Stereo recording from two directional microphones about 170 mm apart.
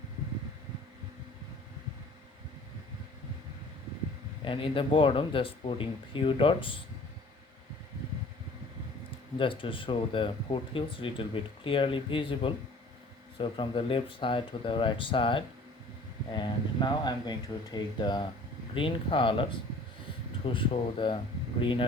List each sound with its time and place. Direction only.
4.4 s speech: 30° left (ahead or behind)
9.4 s speech: 30° left (ahead or behind)